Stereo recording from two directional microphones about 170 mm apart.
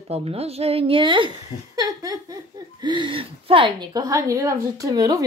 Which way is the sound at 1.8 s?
20° right (ahead or behind).